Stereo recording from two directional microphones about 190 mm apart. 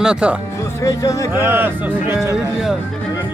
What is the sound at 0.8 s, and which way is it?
Speech, 15° left (ahead or behind).